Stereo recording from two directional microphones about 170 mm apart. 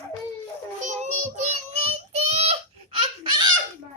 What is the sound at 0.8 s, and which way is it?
Child singing, 45° right (ahead or behind).